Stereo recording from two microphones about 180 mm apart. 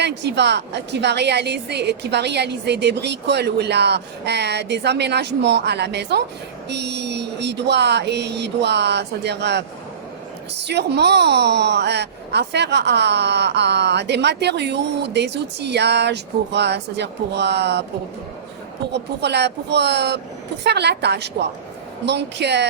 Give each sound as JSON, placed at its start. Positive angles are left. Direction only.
{"t": 0.0, "sound": "a woman's voice", "side_deg": -70}
{"t": 18.9, "sound": "a woman's voice", "side_deg": -70}